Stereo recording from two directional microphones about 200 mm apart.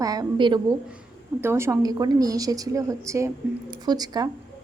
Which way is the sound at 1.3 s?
10° right (ahead or behind).